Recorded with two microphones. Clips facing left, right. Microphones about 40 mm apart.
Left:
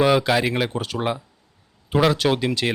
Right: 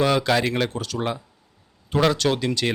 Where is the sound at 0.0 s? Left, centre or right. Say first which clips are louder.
Left 2 dB; centre.